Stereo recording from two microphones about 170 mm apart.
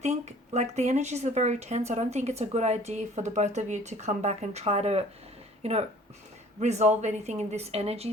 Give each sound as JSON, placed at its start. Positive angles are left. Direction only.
{"t": 0.0, "sound": "speech", "side_deg": -40}